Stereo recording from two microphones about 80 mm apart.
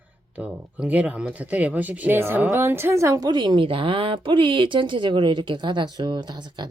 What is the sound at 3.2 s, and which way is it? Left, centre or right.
Speech, right.